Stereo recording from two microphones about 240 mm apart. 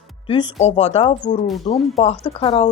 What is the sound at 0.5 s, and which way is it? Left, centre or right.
Speech, left.